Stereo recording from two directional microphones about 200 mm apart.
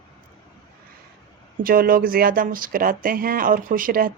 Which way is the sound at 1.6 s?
45° right (ahead or behind).